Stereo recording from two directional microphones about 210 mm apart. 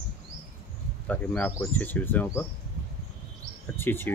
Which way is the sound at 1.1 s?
10° left (ahead or behind).